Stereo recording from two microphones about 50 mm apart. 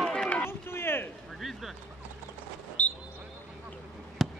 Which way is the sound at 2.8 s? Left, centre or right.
Left.